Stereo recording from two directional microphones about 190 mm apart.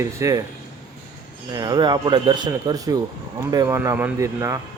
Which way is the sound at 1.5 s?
20° right (ahead or behind).